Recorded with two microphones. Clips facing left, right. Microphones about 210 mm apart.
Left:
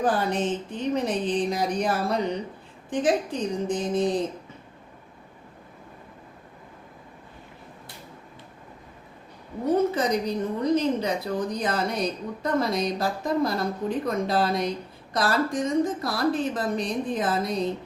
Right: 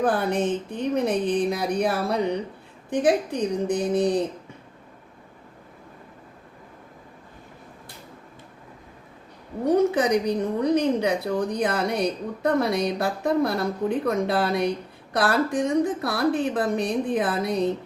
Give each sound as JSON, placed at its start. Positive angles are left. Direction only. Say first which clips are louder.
{"t": 0.0, "sound": "a woman's voice", "louder": "right 2 dB", "side_deg": -60}
{"t": 9.6, "sound": "a woman's voice", "louder": "right 3 dB", "side_deg": -65}